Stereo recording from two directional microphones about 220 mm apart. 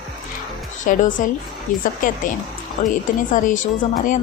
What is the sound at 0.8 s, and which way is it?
A woman's voice, 35° left (ahead or behind).